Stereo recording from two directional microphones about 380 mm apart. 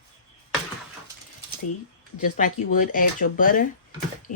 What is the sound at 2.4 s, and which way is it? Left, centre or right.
Speech, left.